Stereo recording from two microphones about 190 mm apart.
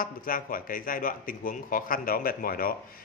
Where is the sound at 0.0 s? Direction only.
50° left (ahead or behind).